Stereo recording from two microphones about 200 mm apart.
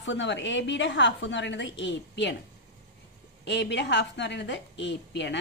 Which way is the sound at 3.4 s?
60° left (ahead or behind).